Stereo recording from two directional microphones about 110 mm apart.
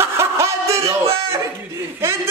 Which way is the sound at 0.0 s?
25° right (ahead or behind).